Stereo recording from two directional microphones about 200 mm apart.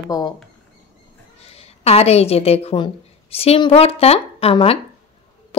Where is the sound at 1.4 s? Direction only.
30° left (ahead or behind).